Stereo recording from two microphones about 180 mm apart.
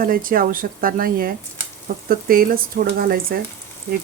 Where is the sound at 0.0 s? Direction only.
50° right (ahead or behind).